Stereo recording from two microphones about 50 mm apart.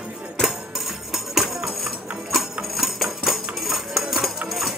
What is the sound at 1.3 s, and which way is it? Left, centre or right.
Music, centre.